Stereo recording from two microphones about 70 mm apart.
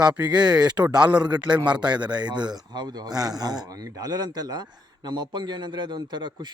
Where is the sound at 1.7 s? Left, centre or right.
Right.